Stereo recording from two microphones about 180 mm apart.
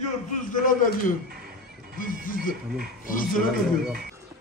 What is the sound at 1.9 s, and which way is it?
A man's voice, 50° left (ahead or behind).